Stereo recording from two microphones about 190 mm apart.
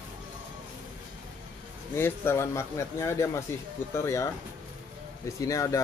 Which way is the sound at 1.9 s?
15° left (ahead or behind).